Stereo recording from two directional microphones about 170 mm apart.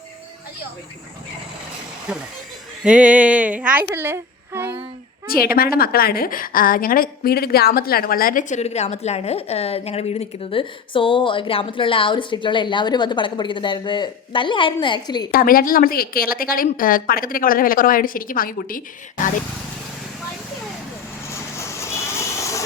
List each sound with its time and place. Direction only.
2.1 s speech: 5° right (ahead or behind)
5.3 s a woman's voice: 60° left (ahead or behind); by 15.3 s 25° left (ahead or behind)
15.3 s a woman's voice: 60° left (ahead or behind)
21.2 s vehicle: 15° left (ahead or behind)